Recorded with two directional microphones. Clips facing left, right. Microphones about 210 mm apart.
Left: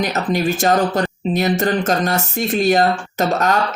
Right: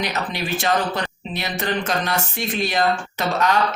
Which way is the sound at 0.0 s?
45° left (ahead or behind).